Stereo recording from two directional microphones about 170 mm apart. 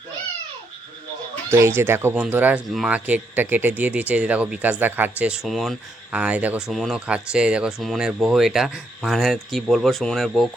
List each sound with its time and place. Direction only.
1.5 s speech: 15° right (ahead or behind); by 10.5 s centre (ahead or behind)